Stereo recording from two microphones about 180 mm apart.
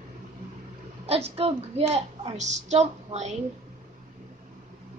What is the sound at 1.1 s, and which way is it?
A woman's voice, 35° right (ahead or behind).